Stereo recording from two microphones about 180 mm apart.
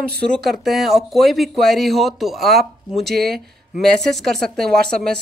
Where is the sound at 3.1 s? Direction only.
60° right (ahead or behind).